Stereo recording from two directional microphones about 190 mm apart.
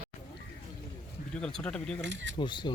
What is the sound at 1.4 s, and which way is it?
Speech, 5° left (ahead or behind).